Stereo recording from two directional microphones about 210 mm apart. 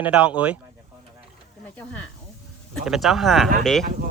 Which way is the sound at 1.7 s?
5° left (ahead or behind).